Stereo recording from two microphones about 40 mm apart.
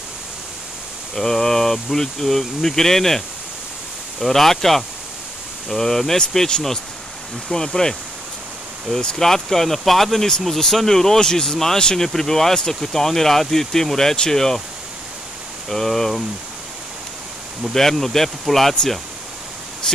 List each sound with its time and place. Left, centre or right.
1.1 s speech: centre
9.2 s speech: centre
15.7 s speech: centre
17.7 s speech: centre